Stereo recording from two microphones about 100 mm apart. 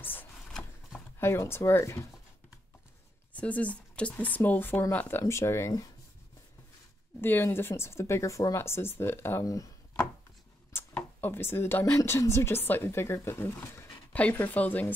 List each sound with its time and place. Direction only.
0.0 s a sound: 20° left (ahead or behind)
0.5 s a sound: 5° left (ahead or behind)
1.2 s speech: 25° left (ahead or behind)
3.3 s speech: 15° left (ahead or behind)
7.2 s speech: 20° left (ahead or behind)
11.0 s speech: 20° left (ahead or behind)